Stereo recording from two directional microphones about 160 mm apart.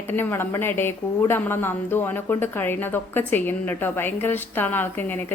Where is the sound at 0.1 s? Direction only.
15° left (ahead or behind).